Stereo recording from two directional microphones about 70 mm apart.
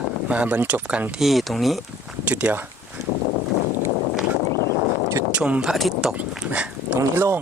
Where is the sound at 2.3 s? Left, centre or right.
Centre.